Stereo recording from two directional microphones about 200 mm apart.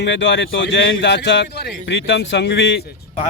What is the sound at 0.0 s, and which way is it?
Speech, 60° left (ahead or behind).